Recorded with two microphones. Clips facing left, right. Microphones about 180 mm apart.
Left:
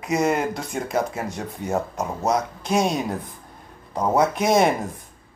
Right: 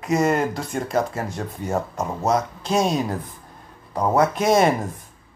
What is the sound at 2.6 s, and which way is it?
Speech, 15° left (ahead or behind).